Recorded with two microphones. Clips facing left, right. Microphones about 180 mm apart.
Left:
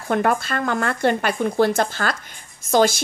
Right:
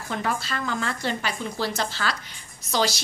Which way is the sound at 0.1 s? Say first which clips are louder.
Left 8 dB; 55° left (ahead or behind).